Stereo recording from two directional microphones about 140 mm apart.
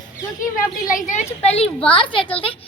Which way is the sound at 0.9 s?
65° left (ahead or behind).